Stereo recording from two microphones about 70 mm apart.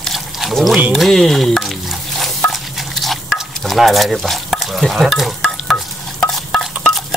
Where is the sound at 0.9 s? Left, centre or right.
Centre.